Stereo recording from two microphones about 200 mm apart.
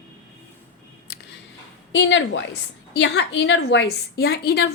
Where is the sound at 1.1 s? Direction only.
50° left (ahead or behind).